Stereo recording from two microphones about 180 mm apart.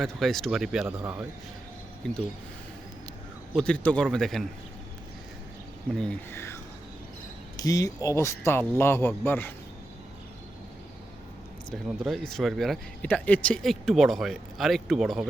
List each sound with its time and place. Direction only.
0.0 s speech: centre (ahead or behind)
3.5 s speech: 5° left (ahead or behind)
6.0 s speech: 10° left (ahead or behind)
11.9 s speech: centre (ahead or behind)